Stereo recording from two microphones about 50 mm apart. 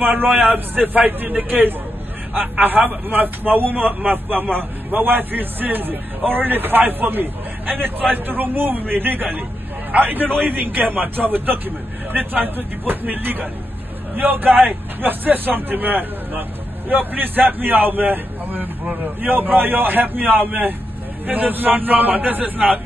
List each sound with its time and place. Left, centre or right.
0.0 s a man's voice: right
21.3 s a man's voice: right